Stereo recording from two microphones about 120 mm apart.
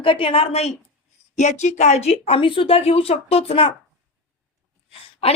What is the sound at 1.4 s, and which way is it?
Speech, 80° left.